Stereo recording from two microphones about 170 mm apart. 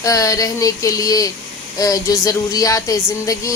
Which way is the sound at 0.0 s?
20° left (ahead or behind).